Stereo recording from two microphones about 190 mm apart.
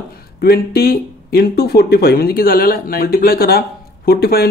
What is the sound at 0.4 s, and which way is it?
Speech, 55° left (ahead or behind).